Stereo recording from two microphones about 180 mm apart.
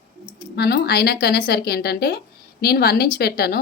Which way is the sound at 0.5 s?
65° left (ahead or behind).